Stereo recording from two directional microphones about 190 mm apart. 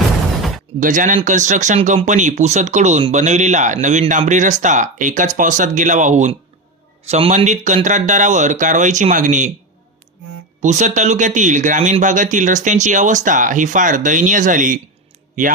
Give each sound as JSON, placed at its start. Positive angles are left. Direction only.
{"t": 0.8, "sound": "speech", "side_deg": -45}
{"t": 10.6, "sound": "speech", "side_deg": -40}